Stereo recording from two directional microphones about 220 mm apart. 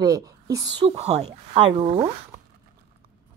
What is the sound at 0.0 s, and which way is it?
Speech, 15° right (ahead or behind).